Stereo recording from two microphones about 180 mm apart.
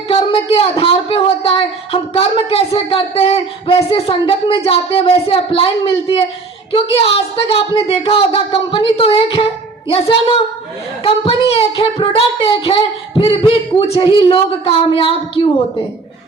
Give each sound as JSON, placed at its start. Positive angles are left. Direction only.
{"t": 0.1, "sound": "speech", "side_deg": 30}